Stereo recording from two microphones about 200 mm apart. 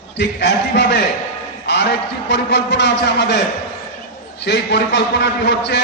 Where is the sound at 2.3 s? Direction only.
60° left (ahead or behind).